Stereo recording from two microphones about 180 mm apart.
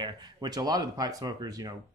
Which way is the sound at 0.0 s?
25° right (ahead or behind).